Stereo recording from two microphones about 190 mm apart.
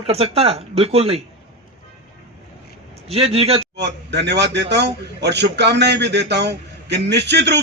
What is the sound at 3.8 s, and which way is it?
A man's voice, 65° right (ahead or behind).